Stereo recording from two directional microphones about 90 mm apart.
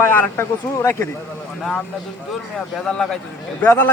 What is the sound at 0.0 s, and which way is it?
A man's voice, 25° left (ahead or behind).